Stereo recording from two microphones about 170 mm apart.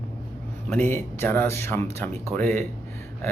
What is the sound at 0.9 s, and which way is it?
Speech, 15° left (ahead or behind).